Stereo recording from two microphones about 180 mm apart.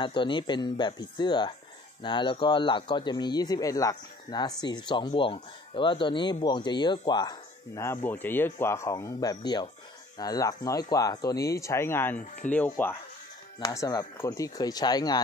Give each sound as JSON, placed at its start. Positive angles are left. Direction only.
{"t": 0.0, "sound": "speech", "side_deg": 25}
{"t": 13.6, "sound": "speech", "side_deg": 20}